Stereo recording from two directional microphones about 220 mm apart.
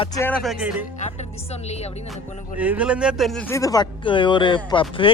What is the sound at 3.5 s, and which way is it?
Speech, 15° left (ahead or behind).